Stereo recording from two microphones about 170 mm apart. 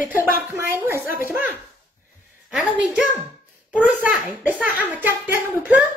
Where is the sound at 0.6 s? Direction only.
15° right (ahead or behind).